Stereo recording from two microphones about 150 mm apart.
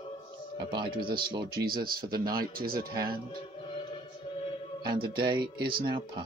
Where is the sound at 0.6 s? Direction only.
30° right (ahead or behind).